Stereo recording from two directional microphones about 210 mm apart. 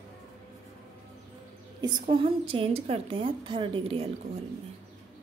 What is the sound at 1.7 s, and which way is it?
A woman's voice, 20° right (ahead or behind).